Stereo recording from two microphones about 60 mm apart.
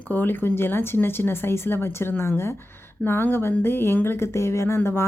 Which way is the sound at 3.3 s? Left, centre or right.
Left.